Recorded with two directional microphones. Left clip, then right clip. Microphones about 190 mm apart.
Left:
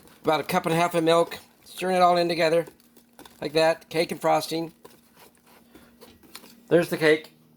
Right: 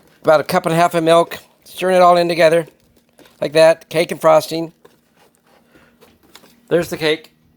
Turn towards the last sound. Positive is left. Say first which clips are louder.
# right 4 dB
turn(degrees=-30)  # may be behind; listen again after turning